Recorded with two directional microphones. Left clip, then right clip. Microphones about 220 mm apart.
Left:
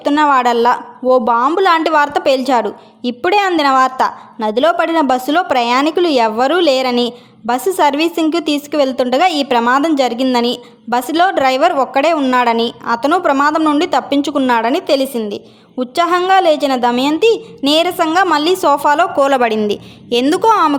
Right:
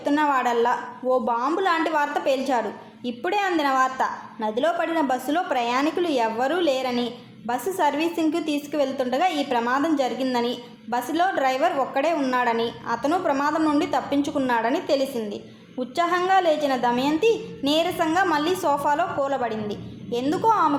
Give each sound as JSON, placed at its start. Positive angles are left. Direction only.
{"t": 0.0, "sound": "a woman's voice", "side_deg": 40}